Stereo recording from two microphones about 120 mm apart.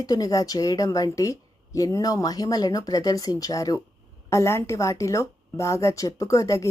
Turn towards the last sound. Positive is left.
turn(degrees=25)  # may be behind; listen again after turning